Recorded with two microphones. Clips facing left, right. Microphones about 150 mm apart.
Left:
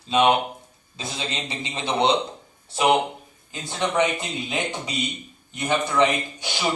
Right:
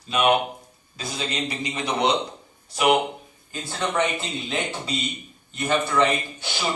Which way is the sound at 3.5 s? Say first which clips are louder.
Left 2 dB; 15° left (ahead or behind).